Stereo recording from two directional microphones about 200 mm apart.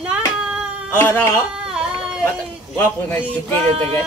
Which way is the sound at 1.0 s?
10° left (ahead or behind).